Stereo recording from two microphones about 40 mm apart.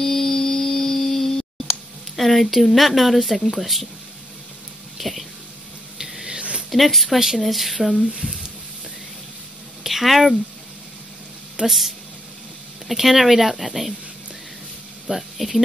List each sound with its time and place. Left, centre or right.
0.0 s a sound: centre
2.1 s speech: centre
4.9 s a sound: centre
6.7 s speech: centre
9.8 s speech: centre
11.6 s speech: right
12.8 s speech: centre
15.0 s speech: centre